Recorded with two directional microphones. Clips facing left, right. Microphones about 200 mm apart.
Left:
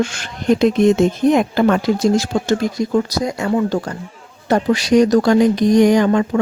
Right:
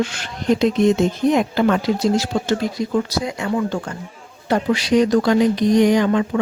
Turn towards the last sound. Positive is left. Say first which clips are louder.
# left 3 dB
turn(degrees=45)  # may be behind; listen again after turning